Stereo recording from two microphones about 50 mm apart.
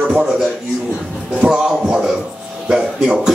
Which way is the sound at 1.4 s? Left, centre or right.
Centre.